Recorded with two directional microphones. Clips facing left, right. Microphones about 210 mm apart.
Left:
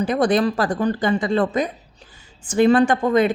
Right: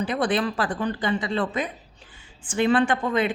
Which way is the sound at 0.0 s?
45° left (ahead or behind).